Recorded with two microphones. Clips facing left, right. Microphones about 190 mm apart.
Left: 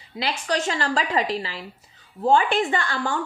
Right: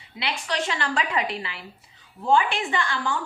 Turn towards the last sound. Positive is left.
turn(degrees=45)  # may be behind; listen again after turning